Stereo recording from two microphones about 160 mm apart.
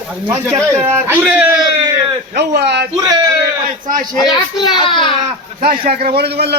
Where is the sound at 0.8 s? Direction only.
15° right (ahead or behind).